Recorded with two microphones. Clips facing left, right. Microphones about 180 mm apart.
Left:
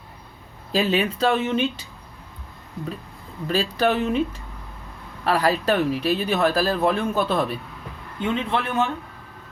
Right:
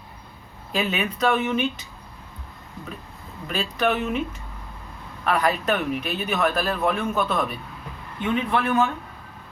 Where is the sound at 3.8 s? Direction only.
35° left (ahead or behind).